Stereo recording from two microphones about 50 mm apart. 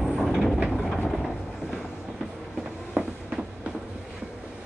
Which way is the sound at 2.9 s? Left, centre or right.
Right.